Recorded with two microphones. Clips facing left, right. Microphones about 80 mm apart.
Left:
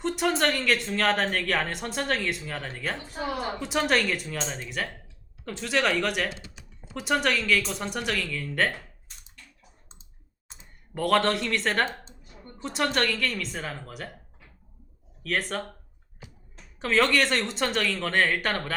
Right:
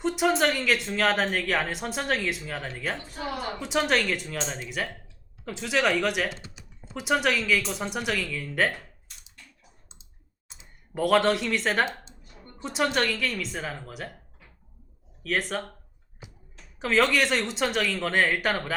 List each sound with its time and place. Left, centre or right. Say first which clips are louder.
0.0 s speech: right 2 dB; centre
10.9 s speech: right 1 dB; centre
15.2 s speech: right 1 dB; centre
16.8 s speech: even; centre